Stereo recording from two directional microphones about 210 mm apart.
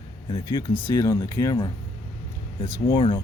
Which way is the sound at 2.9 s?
25° left (ahead or behind).